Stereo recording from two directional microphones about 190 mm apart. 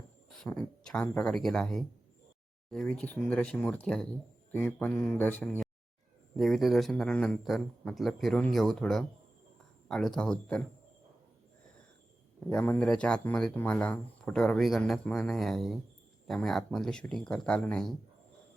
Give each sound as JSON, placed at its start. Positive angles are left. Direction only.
{"t": 0.3, "sound": "speech", "side_deg": 0}
{"t": 12.5, "sound": "speech", "side_deg": 10}